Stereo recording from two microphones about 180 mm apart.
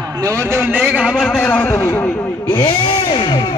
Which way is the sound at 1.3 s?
10° left (ahead or behind).